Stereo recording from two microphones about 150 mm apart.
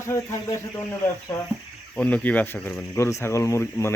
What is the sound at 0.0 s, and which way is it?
Speech, 20° left (ahead or behind).